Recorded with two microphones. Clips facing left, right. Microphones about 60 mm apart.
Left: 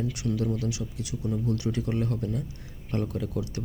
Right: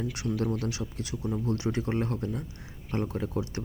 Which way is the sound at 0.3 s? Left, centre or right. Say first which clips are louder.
Right 1 dB; right.